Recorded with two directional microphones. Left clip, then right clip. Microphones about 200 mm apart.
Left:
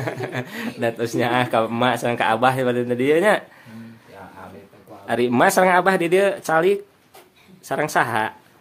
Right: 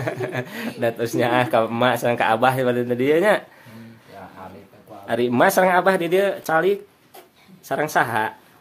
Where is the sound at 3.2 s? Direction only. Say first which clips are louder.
Even; 15° left (ahead or behind).